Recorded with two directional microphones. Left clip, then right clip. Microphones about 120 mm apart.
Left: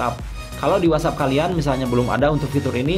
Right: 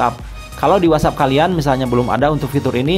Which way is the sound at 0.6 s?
40° right (ahead or behind).